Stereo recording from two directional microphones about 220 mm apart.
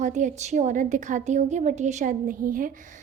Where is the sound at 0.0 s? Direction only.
35° right (ahead or behind).